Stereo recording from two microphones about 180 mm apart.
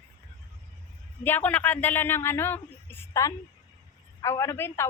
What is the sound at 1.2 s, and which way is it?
A man's voice, 10° left (ahead or behind).